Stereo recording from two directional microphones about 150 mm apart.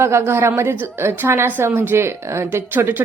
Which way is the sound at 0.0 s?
20° right (ahead or behind).